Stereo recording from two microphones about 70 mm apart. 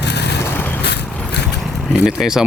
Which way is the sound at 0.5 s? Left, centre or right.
Left.